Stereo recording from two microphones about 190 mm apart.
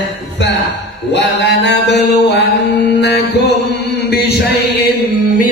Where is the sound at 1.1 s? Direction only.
65° left (ahead or behind).